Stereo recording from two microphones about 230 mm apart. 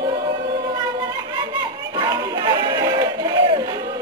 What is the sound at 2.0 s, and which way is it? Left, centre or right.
Music, centre.